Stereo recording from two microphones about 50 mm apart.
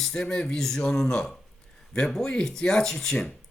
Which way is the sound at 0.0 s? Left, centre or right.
Centre.